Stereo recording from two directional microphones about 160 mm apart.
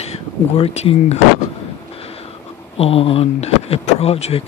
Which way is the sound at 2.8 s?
35° left (ahead or behind).